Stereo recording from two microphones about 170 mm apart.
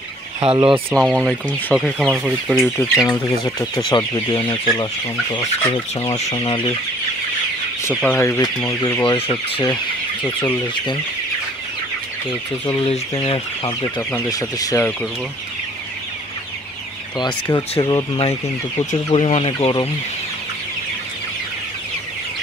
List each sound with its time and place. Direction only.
0.4 s speech: 30° right (ahead or behind)
0.9 s speech: centre (ahead or behind)
2.8 s speech: 20° left (ahead or behind)
6.3 s speech: 25° left (ahead or behind)
7.9 s speech: 5° left (ahead or behind); by 9.8 s 25° left (ahead or behind)
10.2 s speech: 15° left (ahead or behind)
12.7 s speech: 35° left (ahead or behind)
13.9 s speech: 15° left (ahead or behind)
17.2 s speech: 20° left (ahead or behind)